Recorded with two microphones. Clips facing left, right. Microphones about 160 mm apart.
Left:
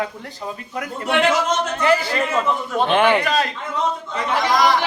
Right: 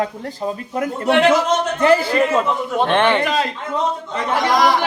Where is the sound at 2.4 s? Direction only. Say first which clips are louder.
Right 1 dB; 15° right (ahead or behind).